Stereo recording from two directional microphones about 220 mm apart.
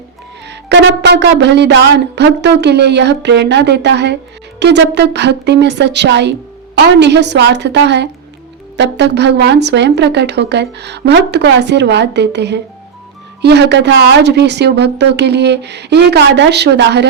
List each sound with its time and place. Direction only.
0.4 s speech: 50° right (ahead or behind)